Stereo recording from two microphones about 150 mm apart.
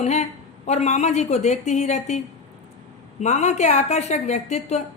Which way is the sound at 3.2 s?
50° left (ahead or behind).